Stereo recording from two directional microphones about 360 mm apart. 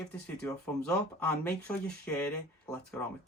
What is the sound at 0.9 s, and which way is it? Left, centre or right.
Speech, centre.